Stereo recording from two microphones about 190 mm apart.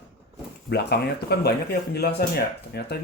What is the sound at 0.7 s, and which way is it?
Speech, 60° left (ahead or behind).